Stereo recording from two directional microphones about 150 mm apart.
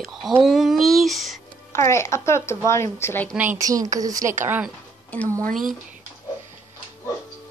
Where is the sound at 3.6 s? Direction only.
25° right (ahead or behind).